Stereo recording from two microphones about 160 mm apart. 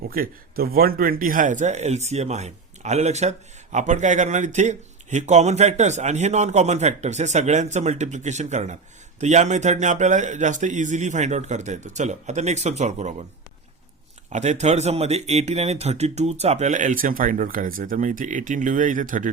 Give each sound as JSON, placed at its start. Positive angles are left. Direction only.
{"t": 0.1, "sound": "speech", "side_deg": -65}
{"t": 14.3, "sound": "speech", "side_deg": -45}